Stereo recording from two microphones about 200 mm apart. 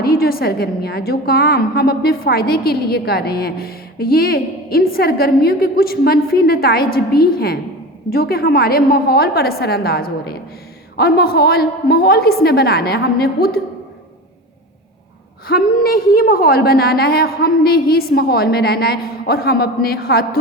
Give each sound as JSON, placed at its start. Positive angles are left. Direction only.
{"t": 0.0, "sound": "a woman's voice", "side_deg": 50}
{"t": 15.4, "sound": "a woman's voice", "side_deg": 50}